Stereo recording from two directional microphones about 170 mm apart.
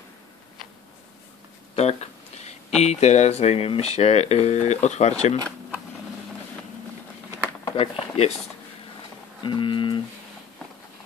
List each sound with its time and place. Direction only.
1.8 s speech: 40° left (ahead or behind)
7.6 s a sound: 30° left (ahead or behind)
9.4 s speech: 30° left (ahead or behind)